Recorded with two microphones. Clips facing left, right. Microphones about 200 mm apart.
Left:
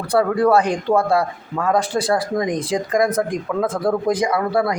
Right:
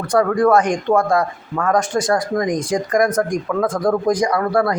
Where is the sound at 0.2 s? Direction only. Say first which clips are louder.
Right 1 dB; 30° left (ahead or behind).